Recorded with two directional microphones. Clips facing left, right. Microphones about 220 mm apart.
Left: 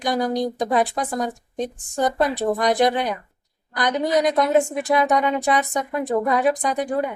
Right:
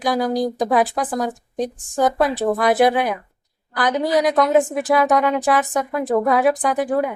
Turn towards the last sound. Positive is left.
turn(degrees=-5)  # may be behind; listen again after turning